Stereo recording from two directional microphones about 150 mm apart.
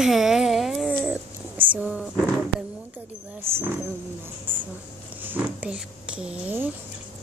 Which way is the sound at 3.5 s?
15° right (ahead or behind).